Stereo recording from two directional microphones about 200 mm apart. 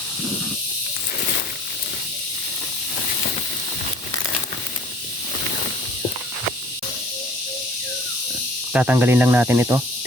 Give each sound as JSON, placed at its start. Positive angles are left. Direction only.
{"t": 8.7, "sound": "speech", "side_deg": -10}